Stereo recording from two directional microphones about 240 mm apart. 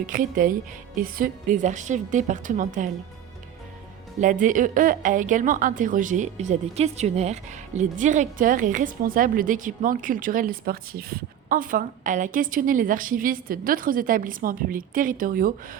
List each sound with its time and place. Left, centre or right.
0.0 s a woman's voice: right
4.2 s a woman's voice: right